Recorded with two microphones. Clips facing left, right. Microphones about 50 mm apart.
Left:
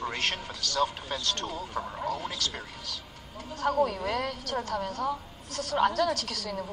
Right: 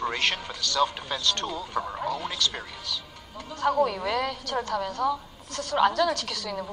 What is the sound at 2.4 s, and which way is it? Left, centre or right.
A man's voice, right.